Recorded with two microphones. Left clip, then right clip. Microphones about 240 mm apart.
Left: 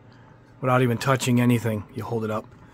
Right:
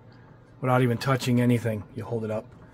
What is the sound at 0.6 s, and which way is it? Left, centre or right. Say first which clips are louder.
Speech: left 2 dB; centre.